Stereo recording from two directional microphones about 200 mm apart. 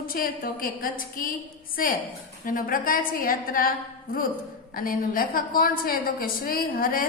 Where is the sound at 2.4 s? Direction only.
40° left (ahead or behind).